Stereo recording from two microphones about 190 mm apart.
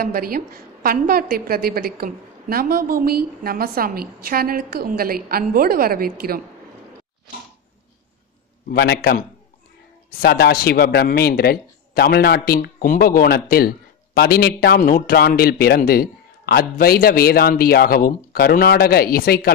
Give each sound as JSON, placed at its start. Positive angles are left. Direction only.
{"t": 0.0, "sound": "a woman's voice", "side_deg": -50}
{"t": 8.7, "sound": "a man's voice", "side_deg": 60}
{"t": 10.2, "sound": "speech", "side_deg": 55}